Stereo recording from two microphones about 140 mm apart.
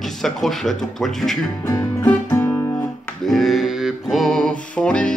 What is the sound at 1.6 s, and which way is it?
Music, 20° left (ahead or behind).